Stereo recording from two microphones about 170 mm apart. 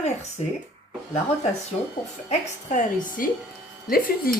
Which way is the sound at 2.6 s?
50° left (ahead or behind).